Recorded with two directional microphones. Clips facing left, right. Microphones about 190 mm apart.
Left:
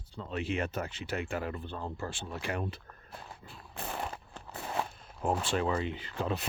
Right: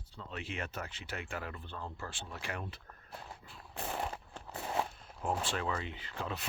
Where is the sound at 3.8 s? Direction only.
30° right (ahead or behind).